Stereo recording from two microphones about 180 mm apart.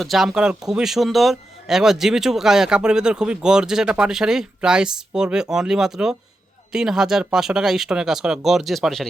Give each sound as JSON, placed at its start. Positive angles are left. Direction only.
{"t": 0.0, "sound": "speech", "side_deg": 0}